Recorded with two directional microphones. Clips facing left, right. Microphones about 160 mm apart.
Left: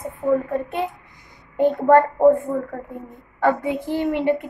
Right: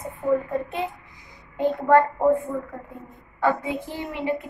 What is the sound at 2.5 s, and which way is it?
Speech, 45° left (ahead or behind).